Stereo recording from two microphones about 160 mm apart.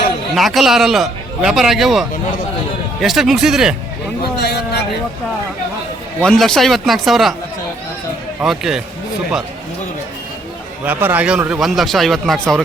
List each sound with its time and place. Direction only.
0.3 s speech: centre (ahead or behind)
4.4 s a sound: 90° left
6.1 s speech: 5° left (ahead or behind)
8.4 s speech: 5° right (ahead or behind)
10.8 s speech: 10° right (ahead or behind)